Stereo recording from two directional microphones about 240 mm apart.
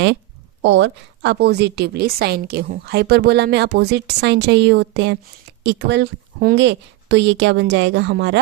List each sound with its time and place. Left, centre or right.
0.6 s a woman's voice: right